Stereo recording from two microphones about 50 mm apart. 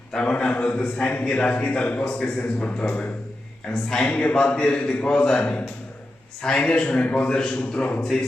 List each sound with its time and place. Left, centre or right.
0.1 s a man's voice: centre
3.7 s a man's voice: centre
4.1 s a man's voice: left
6.9 s a man's voice: left